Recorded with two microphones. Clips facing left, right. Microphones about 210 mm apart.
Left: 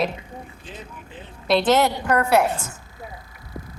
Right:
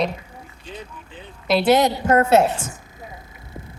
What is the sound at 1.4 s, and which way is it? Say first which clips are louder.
A woman's voice: right 2 dB; 5° right (ahead or behind).